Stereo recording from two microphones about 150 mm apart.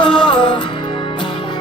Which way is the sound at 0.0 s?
35° left (ahead or behind).